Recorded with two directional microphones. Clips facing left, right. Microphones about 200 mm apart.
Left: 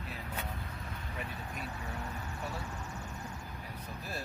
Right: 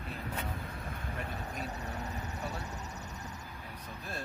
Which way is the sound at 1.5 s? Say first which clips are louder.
Right 2 dB; 40° right (ahead or behind).